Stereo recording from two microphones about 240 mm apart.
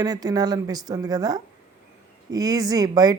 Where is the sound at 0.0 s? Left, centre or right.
Centre.